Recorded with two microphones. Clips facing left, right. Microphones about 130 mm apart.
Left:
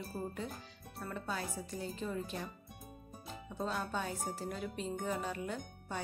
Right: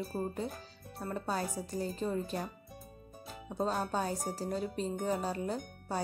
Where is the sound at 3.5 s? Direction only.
40° right (ahead or behind).